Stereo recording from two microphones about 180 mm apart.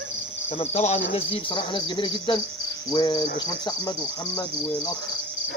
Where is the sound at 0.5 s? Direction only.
35° left (ahead or behind).